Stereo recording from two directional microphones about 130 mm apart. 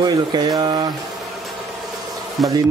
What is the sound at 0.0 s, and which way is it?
Speech, 30° right (ahead or behind).